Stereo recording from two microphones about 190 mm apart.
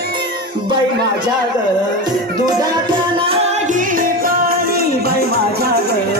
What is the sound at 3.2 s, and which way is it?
Music, 30° right (ahead or behind).